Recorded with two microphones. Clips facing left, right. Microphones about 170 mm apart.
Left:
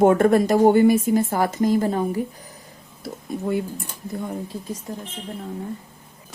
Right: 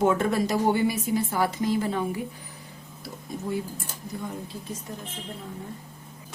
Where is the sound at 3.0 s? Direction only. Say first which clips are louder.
Left 6 dB; 60° left (ahead or behind).